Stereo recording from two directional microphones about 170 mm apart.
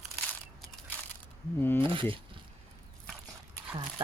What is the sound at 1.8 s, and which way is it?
Speech, 30° right (ahead or behind).